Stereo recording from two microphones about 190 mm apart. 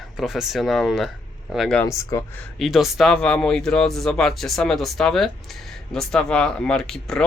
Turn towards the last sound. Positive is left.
turn(degrees=5)  # may be behind; listen again after turning